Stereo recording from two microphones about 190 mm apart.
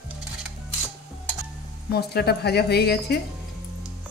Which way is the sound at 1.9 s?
60° left (ahead or behind).